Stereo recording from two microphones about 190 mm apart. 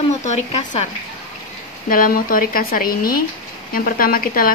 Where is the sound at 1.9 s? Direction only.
50° left (ahead or behind).